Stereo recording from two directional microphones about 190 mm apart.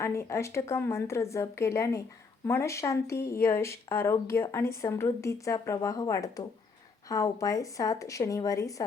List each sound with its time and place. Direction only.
0.0 s speech: 15° left (ahead or behind)